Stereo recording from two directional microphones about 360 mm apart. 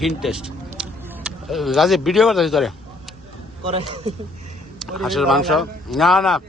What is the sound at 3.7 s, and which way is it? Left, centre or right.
Speech, centre.